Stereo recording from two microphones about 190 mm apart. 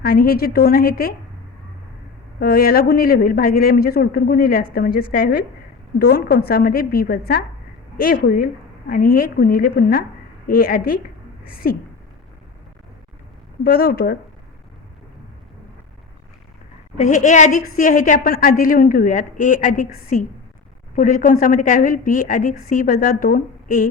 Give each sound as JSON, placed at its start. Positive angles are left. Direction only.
{"t": 0.0, "sound": "a woman's voice", "side_deg": 50}
{"t": 2.4, "sound": "a woman's voice", "side_deg": 50}
{"t": 13.7, "sound": "a woman's voice", "side_deg": 55}
{"t": 17.0, "sound": "a woman's voice", "side_deg": 40}